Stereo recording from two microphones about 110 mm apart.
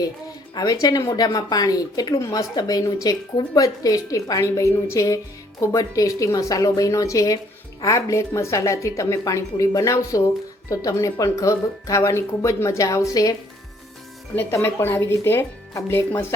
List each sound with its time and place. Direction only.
0.5 s speech: 35° left (ahead or behind)
14.3 s speech: 20° left (ahead or behind)